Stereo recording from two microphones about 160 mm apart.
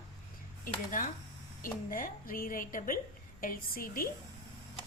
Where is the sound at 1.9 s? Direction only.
60° left (ahead or behind).